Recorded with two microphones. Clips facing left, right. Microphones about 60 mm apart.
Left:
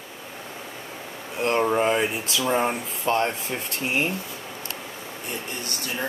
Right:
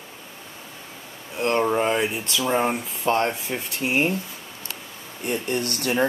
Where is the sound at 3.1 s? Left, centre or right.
Centre.